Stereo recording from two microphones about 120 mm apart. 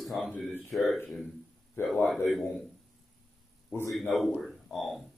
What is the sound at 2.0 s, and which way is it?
Speech, centre (ahead or behind).